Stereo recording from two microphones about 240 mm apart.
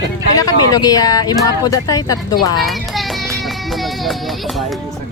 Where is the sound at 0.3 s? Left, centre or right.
Centre.